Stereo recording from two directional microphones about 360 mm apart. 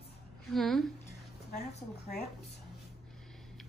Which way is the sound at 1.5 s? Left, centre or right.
Centre.